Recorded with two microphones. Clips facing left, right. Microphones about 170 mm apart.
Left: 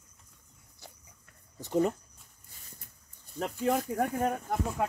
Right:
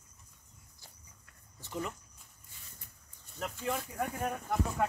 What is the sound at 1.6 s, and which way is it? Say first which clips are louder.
Speech: left 11 dB; 40° left (ahead or behind).